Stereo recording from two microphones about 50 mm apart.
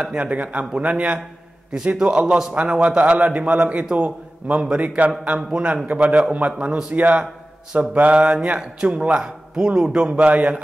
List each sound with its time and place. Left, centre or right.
0.0 s a man's voice: right
1.7 s a man's voice: centre